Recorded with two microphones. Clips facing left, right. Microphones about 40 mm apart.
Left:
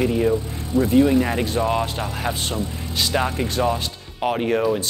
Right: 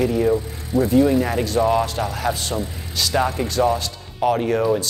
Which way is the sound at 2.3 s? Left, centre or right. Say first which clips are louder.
Right 1 dB; left.